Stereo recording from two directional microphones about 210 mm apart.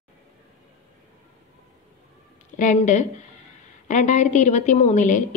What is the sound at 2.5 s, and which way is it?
A woman's voice, 35° left (ahead or behind).